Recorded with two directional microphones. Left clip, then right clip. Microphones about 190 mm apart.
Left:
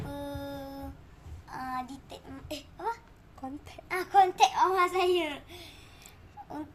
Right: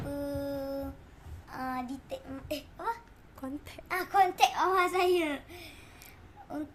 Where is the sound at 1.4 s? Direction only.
20° right (ahead or behind).